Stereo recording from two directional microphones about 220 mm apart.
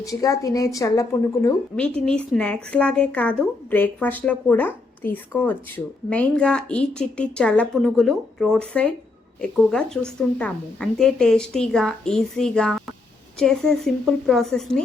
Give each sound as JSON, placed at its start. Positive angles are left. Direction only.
{"t": 0.0, "sound": "a woman's voice", "side_deg": 15}